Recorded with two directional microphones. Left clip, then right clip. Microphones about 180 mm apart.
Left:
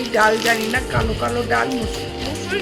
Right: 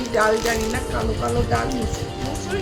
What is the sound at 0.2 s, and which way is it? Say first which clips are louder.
Speech: left 3 dB; 20° left (ahead or behind).